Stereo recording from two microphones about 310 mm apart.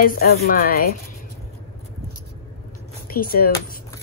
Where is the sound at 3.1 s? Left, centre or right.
Left.